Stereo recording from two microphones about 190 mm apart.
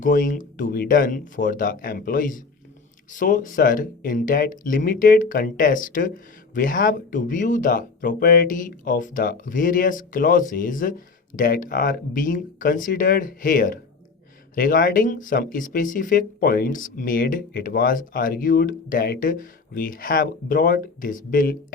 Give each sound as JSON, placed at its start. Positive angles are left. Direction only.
{"t": 0.0, "sound": "speech", "side_deg": 45}